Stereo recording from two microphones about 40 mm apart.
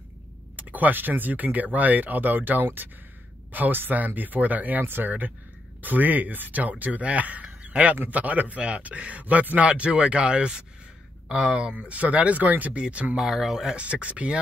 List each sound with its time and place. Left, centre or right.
0.6 s speech: right
4.8 s speech: right
5.8 s speech: right
9.7 s speech: right
11.2 s speech: centre
11.5 s speech: right
13.1 s speech: centre
13.7 s speech: right